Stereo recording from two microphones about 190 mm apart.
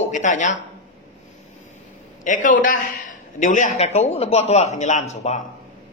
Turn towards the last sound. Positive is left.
turn(degrees=35)  # may be behind; listen again after turning